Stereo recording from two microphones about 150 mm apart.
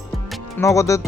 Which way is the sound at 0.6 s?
20° left (ahead or behind).